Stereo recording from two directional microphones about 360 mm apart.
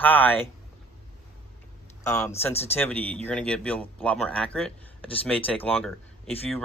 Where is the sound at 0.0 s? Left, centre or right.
Centre.